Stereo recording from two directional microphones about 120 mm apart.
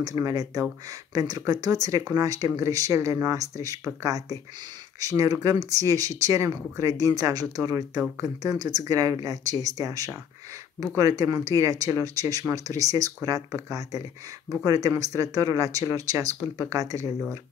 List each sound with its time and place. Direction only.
0.0 s speech: 30° right (ahead or behind)